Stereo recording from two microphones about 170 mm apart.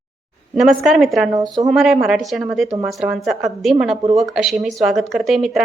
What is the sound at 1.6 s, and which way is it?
A woman's voice, centre (ahead or behind).